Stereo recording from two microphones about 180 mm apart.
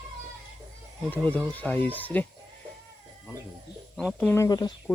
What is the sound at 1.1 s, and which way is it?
Speech, 10° left (ahead or behind).